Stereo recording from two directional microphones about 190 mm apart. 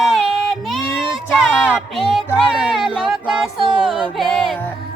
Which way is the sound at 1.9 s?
5° right (ahead or behind).